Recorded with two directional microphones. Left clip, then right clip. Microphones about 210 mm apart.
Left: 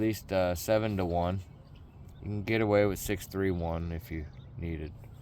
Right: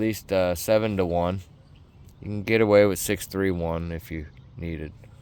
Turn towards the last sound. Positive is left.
turn(degrees=-55)  # may be behind; listen again after turning